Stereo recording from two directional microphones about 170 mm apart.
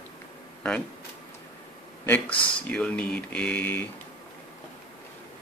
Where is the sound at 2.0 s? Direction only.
10° left (ahead or behind).